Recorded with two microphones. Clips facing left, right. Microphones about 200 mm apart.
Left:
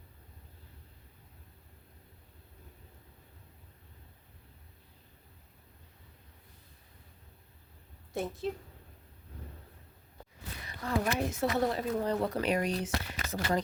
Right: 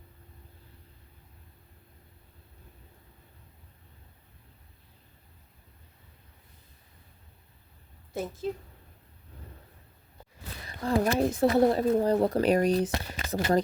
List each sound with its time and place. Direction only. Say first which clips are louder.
8.1 s a woman's voice: right 2 dB; centre (ahead or behind)
10.8 s speech: right 6 dB; 35° right (ahead or behind)